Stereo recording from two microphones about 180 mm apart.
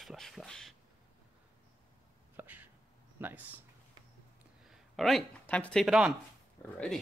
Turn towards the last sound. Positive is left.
turn(degrees=5)  # may be behind; listen again after turning